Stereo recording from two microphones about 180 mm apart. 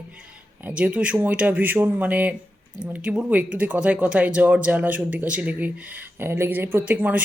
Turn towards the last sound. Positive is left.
turn(degrees=-10)  # may be behind; listen again after turning